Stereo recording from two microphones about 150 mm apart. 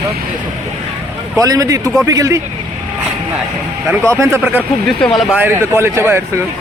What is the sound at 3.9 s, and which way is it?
Speech, 15° right (ahead or behind).